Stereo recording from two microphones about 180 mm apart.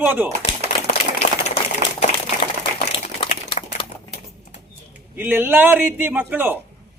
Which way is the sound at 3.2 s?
30° left (ahead or behind).